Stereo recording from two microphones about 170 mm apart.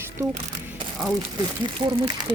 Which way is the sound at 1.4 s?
30° right (ahead or behind).